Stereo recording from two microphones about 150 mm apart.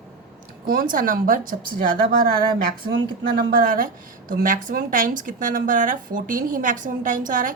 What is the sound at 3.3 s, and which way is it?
A woman's voice, 70° right (ahead or behind).